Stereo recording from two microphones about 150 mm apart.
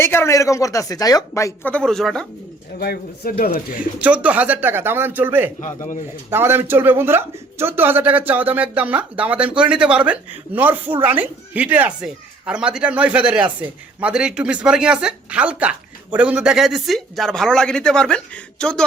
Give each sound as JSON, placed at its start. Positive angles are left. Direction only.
{"t": 0.0, "sound": "speech", "side_deg": 15}
{"t": 1.7, "sound": "speech", "side_deg": 5}
{"t": 2.7, "sound": "speech", "side_deg": 90}
{"t": 3.8, "sound": "speech", "side_deg": -10}